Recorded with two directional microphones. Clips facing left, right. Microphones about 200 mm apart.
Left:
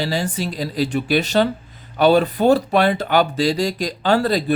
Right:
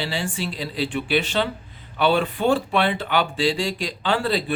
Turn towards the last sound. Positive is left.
turn(degrees=40)  # may be behind; listen again after turning